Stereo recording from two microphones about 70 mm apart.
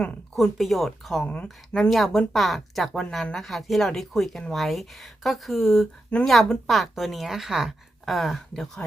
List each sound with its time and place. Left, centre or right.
0.3 s a woman's voice: centre
1.2 s speech: centre
1.5 s a woman's voice: centre